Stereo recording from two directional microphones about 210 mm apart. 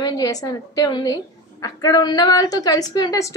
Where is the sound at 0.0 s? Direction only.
15° left (ahead or behind).